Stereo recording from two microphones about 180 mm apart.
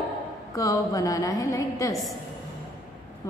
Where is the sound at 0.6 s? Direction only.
20° left (ahead or behind).